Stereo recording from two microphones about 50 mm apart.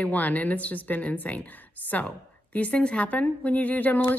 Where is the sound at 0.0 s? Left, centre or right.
Left.